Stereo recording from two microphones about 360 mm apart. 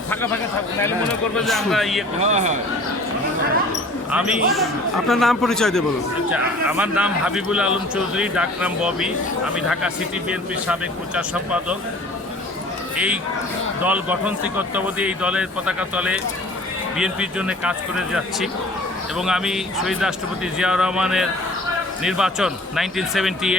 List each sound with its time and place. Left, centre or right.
1.4 s a man's voice: centre
2.2 s speech: centre
4.1 s a man's voice: centre
13.8 s a man's voice: centre